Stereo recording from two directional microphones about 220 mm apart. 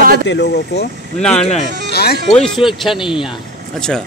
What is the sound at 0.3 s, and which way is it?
Speech, 50° left (ahead or behind).